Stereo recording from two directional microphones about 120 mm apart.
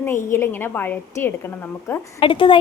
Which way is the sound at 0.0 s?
20° left (ahead or behind).